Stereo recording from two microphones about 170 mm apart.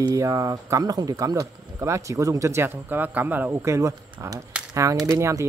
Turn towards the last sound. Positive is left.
turn(degrees=-20)  # may be behind; listen again after turning